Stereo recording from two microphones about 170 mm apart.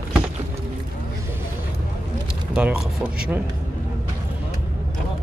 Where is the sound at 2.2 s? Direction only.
5° right (ahead or behind).